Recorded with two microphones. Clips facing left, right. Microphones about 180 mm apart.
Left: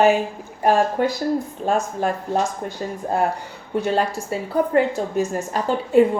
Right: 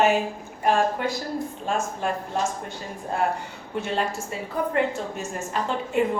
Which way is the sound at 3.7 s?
40° left (ahead or behind).